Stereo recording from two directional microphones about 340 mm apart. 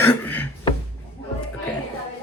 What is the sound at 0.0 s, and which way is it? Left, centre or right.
Beatboxing, centre.